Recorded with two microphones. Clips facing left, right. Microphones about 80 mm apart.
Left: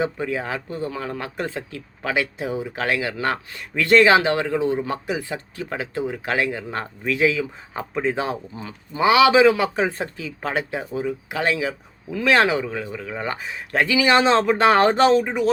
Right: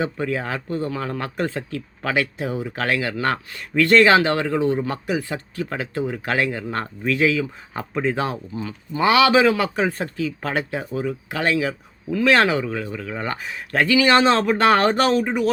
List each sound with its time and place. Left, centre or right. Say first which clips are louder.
0.0 s speech: even; centre